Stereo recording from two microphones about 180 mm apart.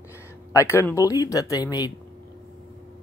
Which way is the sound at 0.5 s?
15° left (ahead or behind).